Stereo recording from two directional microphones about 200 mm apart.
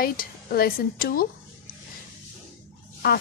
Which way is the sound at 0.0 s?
50° left (ahead or behind).